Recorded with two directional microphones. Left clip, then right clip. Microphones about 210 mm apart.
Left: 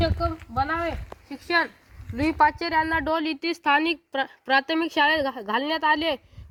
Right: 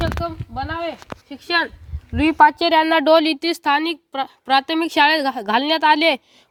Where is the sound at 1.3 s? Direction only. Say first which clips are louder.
Right 3 dB; 55° right (ahead or behind).